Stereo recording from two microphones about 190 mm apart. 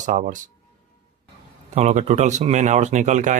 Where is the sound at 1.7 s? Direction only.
35° right (ahead or behind).